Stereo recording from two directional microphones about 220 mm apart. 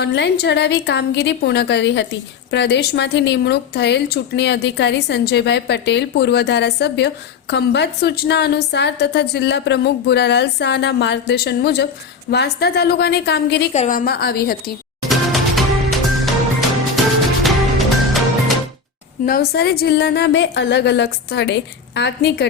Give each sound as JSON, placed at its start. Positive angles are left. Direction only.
{"t": 0.0, "sound": "speech", "side_deg": 50}
{"t": 13.7, "sound": "speech", "side_deg": 35}
{"t": 15.1, "sound": "music", "side_deg": 0}
{"t": 19.2, "sound": "speech", "side_deg": 45}